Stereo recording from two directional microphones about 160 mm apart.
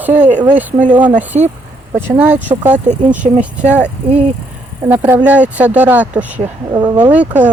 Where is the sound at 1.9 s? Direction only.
10° right (ahead or behind).